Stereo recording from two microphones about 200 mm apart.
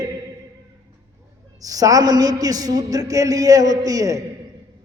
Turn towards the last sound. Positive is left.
turn(degrees=-15)  # may be behind; listen again after turning